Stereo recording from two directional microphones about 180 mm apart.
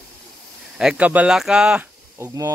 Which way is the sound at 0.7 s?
5° right (ahead or behind).